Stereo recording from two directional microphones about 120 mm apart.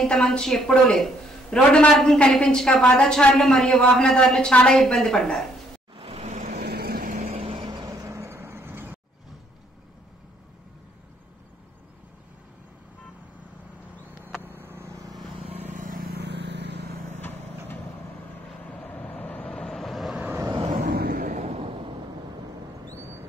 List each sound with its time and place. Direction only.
0.0 s a woman's voice: 5° left (ahead or behind)
5.9 s vehicle: 55° right (ahead or behind)
6.2 s vehicle: 80° right
7.1 s vehicle: 60° right (ahead or behind); by 9.0 s 15° right (ahead or behind)
14.1 s vehicle: 10° right (ahead or behind); by 15.2 s 30° right (ahead or behind)
15.7 s vehicle: 90° right
18.7 s vehicle: 10° left (ahead or behind)
20.2 s vehicle: 15° right (ahead or behind)
20.6 s vehicle: 85° right; by 21.9 s 50° right (ahead or behind)